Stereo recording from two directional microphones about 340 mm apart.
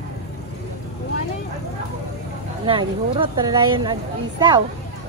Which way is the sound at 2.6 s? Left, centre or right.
Centre.